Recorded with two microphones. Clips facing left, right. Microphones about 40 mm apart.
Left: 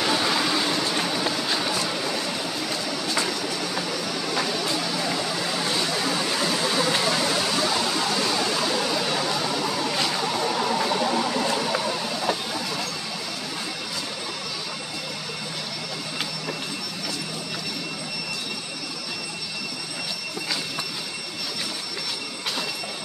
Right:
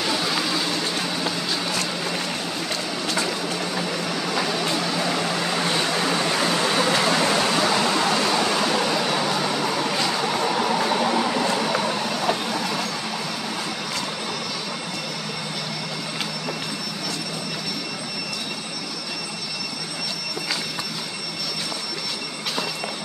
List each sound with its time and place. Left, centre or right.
0.0 s vehicle: centre
5.9 s a sound: right
10.0 s vehicle: right